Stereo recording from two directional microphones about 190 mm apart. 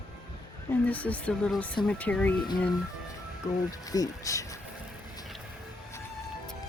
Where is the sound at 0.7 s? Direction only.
10° left (ahead or behind).